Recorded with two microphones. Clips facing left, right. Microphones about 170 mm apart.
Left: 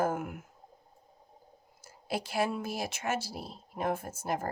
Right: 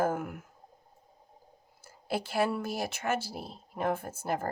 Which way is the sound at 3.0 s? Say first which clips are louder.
Right 2 dB; 55° right (ahead or behind).